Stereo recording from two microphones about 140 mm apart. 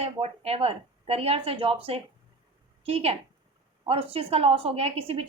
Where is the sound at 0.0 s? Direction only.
45° right (ahead or behind).